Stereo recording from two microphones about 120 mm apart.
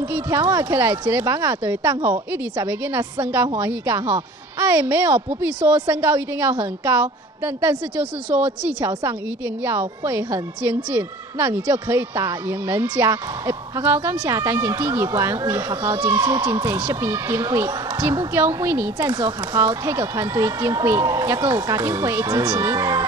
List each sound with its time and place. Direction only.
0.1 s a woman's voice: 15° right (ahead or behind)
3.5 s a woman's voice: 15° right (ahead or behind)
18.9 s speech: 35° right (ahead or behind)
19.9 s speech: 20° right (ahead or behind)